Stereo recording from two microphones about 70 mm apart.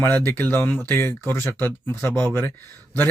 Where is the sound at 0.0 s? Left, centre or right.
Left.